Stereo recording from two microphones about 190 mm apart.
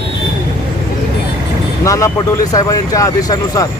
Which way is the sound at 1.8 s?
15° left (ahead or behind).